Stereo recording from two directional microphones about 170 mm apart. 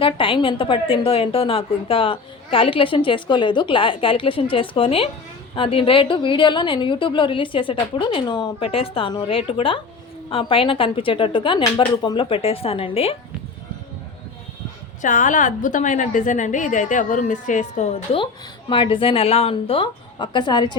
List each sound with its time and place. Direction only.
0.0 s a woman's voice: 30° left (ahead or behind)
15.0 s a woman's voice: 50° left (ahead or behind)
18.7 s a woman's voice: 30° left (ahead or behind)